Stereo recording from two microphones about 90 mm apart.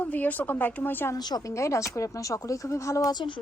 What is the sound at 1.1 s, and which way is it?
Speech, 50° left (ahead or behind).